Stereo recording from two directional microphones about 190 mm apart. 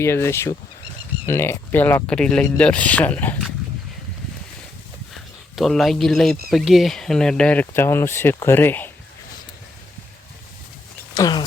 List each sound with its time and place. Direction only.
0.0 s speech: 15° left (ahead or behind)
5.1 s speech: centre (ahead or behind)
11.1 s a sound: 20° left (ahead or behind)